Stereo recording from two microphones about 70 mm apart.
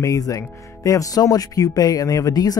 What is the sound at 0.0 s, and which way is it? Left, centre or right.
Speech, left.